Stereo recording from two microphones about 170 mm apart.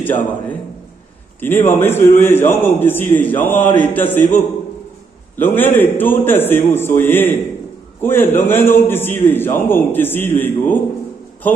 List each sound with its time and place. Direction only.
0.0 s a man's voice: 10° left (ahead or behind)
5.4 s a man's voice: 10° left (ahead or behind)